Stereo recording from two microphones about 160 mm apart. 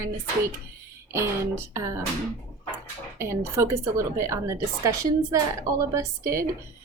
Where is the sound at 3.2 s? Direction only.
15° right (ahead or behind).